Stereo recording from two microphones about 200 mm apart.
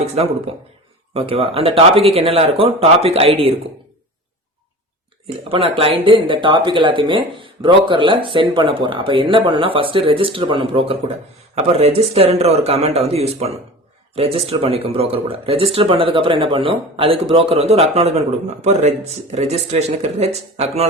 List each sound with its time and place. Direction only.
0.2 s a man's voice: 30° right (ahead or behind)
5.5 s a man's voice: 25° right (ahead or behind)